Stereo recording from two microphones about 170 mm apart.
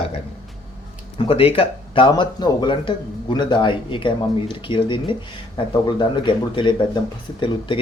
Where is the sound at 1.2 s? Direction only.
30° left (ahead or behind).